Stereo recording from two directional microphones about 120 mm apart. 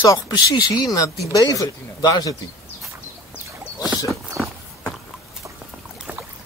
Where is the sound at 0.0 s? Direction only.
35° left (ahead or behind).